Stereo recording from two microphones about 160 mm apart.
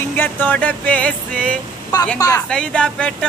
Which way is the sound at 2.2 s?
20° left (ahead or behind).